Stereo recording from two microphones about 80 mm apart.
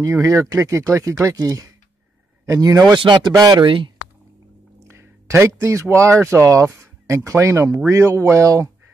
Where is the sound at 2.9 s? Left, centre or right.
Right.